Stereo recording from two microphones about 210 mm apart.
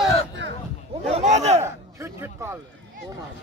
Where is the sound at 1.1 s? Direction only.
35° right (ahead or behind).